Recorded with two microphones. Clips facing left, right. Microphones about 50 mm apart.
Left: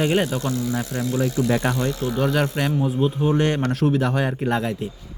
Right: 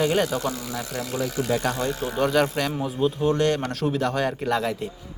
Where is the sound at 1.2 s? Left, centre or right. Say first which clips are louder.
Left 5 dB; right.